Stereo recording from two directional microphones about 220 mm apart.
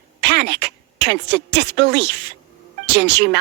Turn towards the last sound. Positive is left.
turn(degrees=-50)  # may be behind; listen again after turning